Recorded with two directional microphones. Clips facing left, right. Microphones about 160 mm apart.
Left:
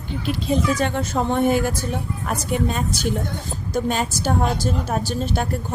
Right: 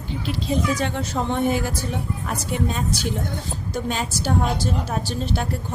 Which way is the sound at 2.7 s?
50° left (ahead or behind).